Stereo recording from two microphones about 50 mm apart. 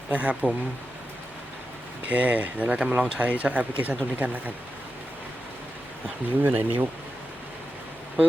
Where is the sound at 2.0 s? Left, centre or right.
Right.